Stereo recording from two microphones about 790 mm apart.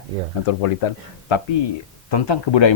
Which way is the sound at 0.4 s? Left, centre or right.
Left.